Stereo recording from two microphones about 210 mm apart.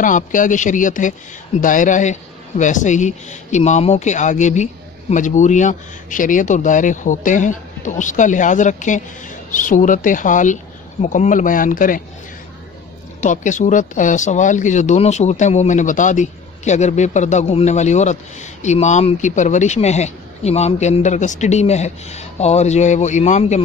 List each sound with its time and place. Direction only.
0.0 s speech: 40° left (ahead or behind)
13.2 s speech: 35° left (ahead or behind)